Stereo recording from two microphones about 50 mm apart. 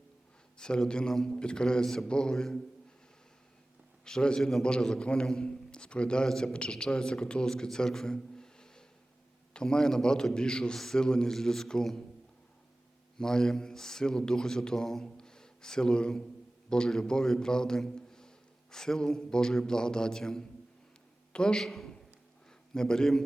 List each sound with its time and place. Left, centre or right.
0.6 s a man's voice: centre
4.0 s a man's voice: centre
13.1 s a man's voice: centre